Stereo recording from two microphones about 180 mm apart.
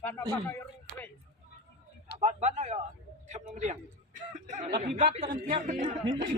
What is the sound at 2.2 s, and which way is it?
Speech, 40° right (ahead or behind).